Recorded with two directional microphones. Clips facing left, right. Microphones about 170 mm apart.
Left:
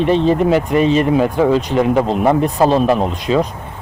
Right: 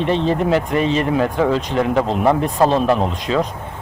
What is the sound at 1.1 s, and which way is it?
Speech, 10° left (ahead or behind).